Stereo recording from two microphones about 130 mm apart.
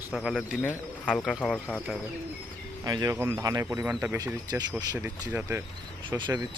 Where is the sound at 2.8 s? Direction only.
25° right (ahead or behind).